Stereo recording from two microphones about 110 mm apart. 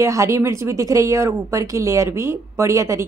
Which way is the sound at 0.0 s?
25° right (ahead or behind).